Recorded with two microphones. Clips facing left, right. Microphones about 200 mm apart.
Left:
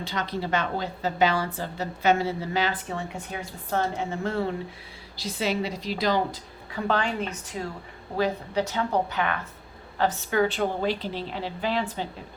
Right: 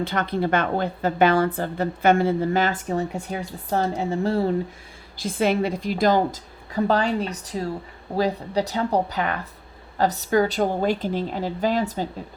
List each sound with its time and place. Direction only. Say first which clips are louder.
0.0 s a woman's voice: right 7 dB; 55° right (ahead or behind); by 4.4 s 35° right (ahead or behind)
5.1 s a woman's voice: right 6 dB; 50° right (ahead or behind)